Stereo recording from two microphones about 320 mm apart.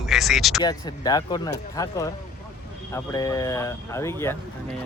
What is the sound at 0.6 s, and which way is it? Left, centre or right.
Speech, centre.